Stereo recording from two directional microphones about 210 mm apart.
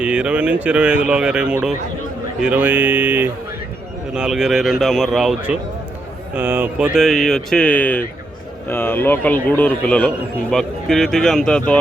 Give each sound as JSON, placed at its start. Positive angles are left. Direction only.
{"t": 0.0, "sound": "speech", "side_deg": -5}